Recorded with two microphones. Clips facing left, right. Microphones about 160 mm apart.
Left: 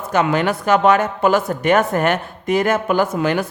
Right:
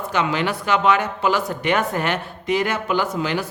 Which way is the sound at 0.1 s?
45° left (ahead or behind).